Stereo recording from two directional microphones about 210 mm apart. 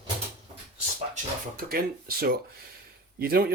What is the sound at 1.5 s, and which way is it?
Speech, 45° right (ahead or behind).